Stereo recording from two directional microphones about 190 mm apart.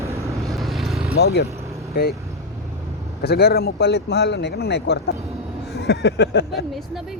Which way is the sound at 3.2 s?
55° left (ahead or behind).